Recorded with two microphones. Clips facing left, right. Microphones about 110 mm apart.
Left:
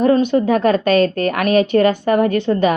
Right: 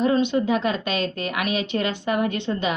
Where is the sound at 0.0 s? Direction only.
45° left (ahead or behind).